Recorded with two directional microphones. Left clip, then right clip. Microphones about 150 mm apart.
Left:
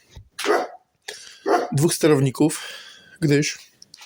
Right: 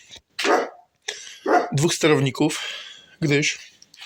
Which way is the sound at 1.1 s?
40° left (ahead or behind).